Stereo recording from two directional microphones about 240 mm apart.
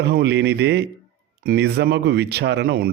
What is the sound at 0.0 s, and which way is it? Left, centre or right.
Speech, right.